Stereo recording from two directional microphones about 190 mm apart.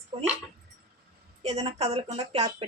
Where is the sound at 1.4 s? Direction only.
35° right (ahead or behind).